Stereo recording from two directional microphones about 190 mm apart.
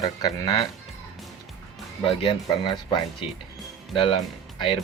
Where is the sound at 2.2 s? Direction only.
25° left (ahead or behind).